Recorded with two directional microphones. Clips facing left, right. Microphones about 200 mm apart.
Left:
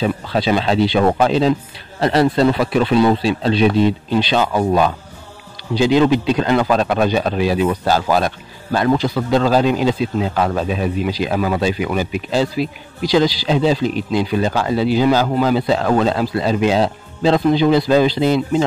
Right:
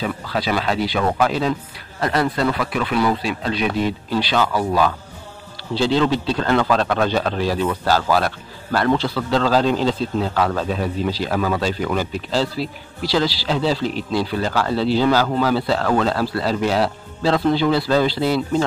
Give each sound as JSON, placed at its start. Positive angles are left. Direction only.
{"t": 0.0, "sound": "speech", "side_deg": 25}